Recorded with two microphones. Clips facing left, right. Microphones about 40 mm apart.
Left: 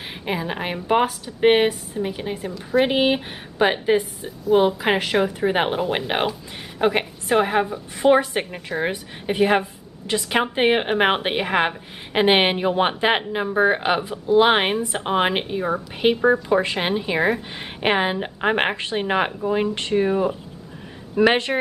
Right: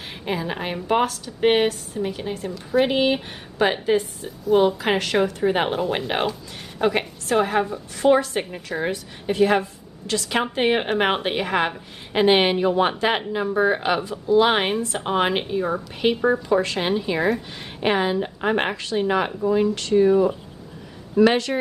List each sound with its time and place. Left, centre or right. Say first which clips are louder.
0.2 s a woman's voice: even; centre
2.5 s a woman's voice: left 1 dB; centre
2.9 s a woman's voice: left 1 dB; centre